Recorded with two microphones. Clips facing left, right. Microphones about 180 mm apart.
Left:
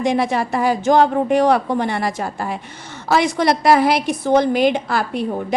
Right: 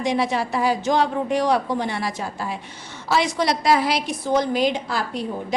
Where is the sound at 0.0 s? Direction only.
50° left (ahead or behind).